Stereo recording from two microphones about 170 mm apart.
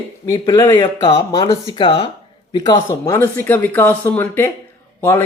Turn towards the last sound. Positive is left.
turn(degrees=15)  # may be behind; listen again after turning